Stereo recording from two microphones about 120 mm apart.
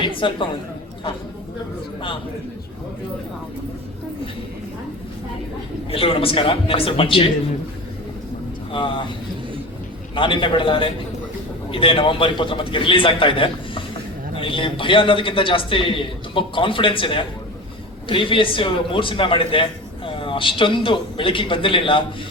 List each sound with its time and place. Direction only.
0.0 s a woman's voice: 45° left (ahead or behind)
5.9 s a man's voice: 50° left (ahead or behind)
8.7 s a man's voice: 45° left (ahead or behind)
10.2 s a man's voice: 45° left (ahead or behind)